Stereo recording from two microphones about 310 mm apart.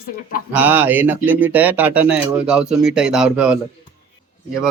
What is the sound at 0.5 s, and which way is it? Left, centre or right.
Speech, centre.